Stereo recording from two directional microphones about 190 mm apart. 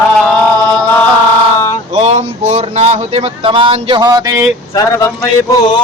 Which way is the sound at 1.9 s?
35° right (ahead or behind).